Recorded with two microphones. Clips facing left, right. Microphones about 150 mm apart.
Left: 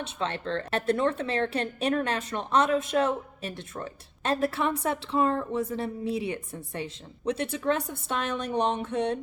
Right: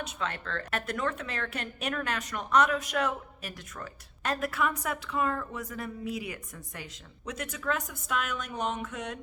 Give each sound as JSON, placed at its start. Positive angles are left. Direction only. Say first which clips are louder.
{"t": 0.0, "sound": "a woman's voice", "louder": "left 4 dB", "side_deg": 30}